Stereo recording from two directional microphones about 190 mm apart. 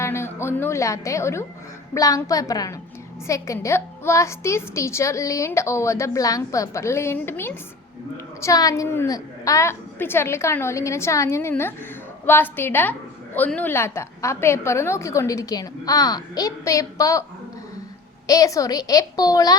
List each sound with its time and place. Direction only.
0.0 s a woman's voice: 15° left (ahead or behind)
18.3 s a woman's voice: 15° left (ahead or behind)